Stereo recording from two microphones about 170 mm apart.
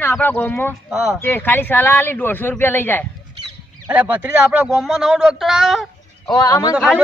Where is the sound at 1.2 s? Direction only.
10° left (ahead or behind).